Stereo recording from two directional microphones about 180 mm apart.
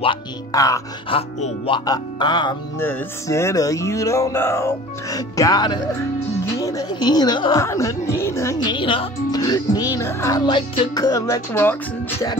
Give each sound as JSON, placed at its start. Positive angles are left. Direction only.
{"t": 0.0, "sound": "speech", "side_deg": 25}
{"t": 1.1, "sound": "speech", "side_deg": 30}
{"t": 2.8, "sound": "a woman's voice", "side_deg": 15}
{"t": 8.7, "sound": "speech", "side_deg": 25}